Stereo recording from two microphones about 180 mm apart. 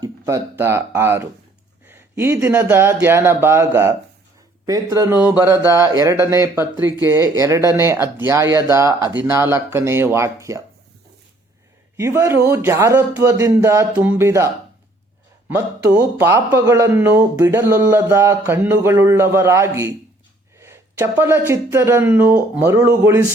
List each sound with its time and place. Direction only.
0.0 s speech: 15° right (ahead or behind)
11.9 s speech: 15° right (ahead or behind)